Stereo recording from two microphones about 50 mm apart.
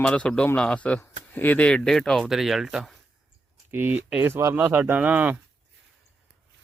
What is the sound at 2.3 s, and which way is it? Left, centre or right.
Speech, centre.